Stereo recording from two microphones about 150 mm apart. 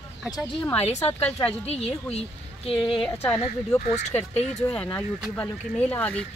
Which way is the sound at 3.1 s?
15° left (ahead or behind).